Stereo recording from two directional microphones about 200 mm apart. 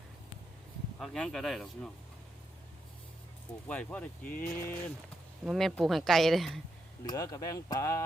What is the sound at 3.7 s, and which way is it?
Speech, 5° left (ahead or behind).